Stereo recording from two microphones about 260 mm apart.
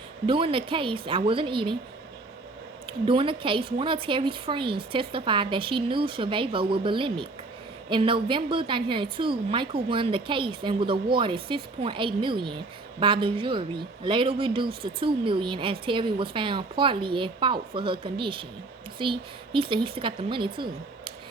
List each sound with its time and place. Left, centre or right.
0.3 s a woman's voice: centre
2.8 s a woman's voice: centre